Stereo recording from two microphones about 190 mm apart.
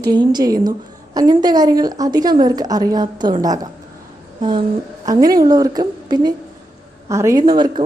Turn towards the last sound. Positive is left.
turn(degrees=-25)  # may be behind; listen again after turning